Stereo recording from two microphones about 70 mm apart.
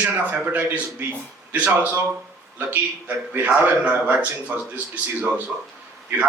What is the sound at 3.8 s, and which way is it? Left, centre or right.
Speech, centre.